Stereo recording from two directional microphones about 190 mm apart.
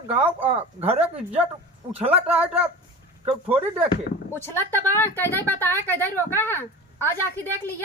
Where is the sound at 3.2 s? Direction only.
30° right (ahead or behind).